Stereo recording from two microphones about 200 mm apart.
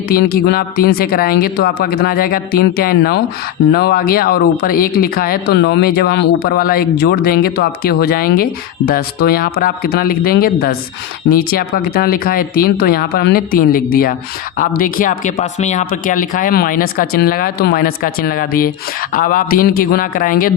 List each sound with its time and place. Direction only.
0.1 s speech: 50° left (ahead or behind)